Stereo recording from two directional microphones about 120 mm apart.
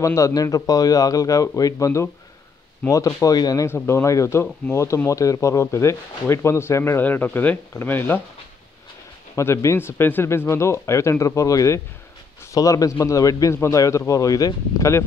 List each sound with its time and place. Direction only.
0.0 s speech: 25° left (ahead or behind)
9.3 s speech: 25° left (ahead or behind)